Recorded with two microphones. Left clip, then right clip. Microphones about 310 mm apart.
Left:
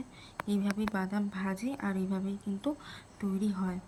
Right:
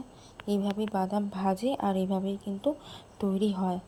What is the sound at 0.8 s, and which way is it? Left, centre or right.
Speech, centre.